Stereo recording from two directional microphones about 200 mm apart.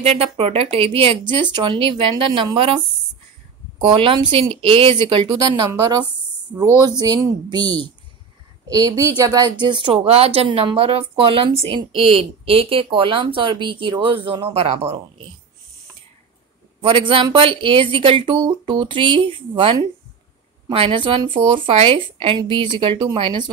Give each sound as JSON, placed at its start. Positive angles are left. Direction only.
{"t": 0.0, "sound": "speech", "side_deg": -30}
{"t": 3.9, "sound": "speech", "side_deg": -25}
{"t": 16.8, "sound": "speech", "side_deg": -25}